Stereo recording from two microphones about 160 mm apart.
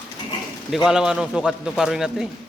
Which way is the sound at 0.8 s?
5° right (ahead or behind).